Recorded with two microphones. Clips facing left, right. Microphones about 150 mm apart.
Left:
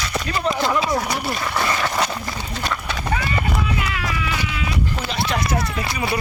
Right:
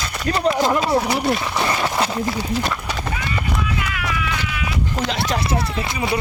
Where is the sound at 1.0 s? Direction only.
5° right (ahead or behind).